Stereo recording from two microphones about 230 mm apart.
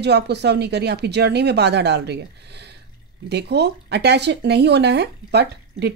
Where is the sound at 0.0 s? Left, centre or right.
Right.